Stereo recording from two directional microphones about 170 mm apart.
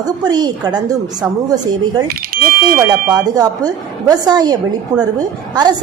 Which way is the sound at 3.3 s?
20° right (ahead or behind).